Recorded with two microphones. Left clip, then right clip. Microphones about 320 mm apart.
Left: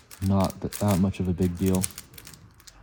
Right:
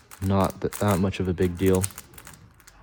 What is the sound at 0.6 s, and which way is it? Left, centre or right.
Speech, left.